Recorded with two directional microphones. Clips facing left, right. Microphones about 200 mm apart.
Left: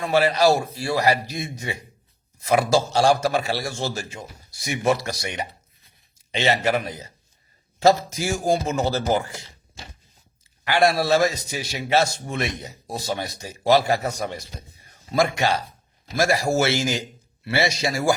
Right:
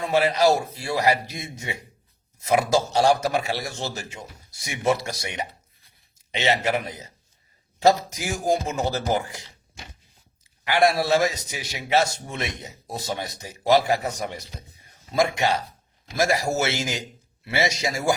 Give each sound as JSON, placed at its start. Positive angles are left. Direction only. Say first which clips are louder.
{"t": 0.1, "sound": "a man's voice", "louder": "left 1 dB", "side_deg": -20}
{"t": 10.7, "sound": "a man's voice", "louder": "left 1 dB", "side_deg": -15}